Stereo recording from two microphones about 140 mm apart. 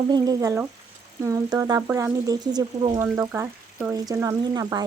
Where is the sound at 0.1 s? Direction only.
30° right (ahead or behind).